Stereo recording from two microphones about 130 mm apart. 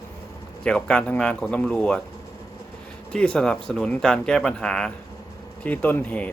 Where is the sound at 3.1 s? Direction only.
5° left (ahead or behind).